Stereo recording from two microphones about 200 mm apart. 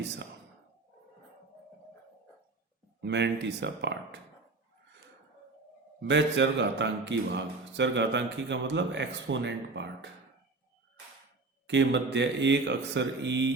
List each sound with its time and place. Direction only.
3.0 s a man's voice: 60° right (ahead or behind)
6.0 s a man's voice: 60° right (ahead or behind)
11.6 s a man's voice: 65° right (ahead or behind)